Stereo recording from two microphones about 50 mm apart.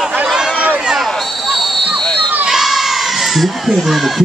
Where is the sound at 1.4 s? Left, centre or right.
Centre.